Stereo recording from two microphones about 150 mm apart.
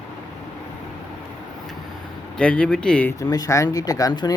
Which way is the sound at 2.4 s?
5° left (ahead or behind).